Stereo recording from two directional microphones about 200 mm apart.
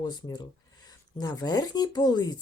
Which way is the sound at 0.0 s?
20° left (ahead or behind).